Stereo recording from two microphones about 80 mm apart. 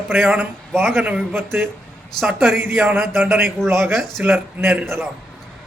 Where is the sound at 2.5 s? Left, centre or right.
Right.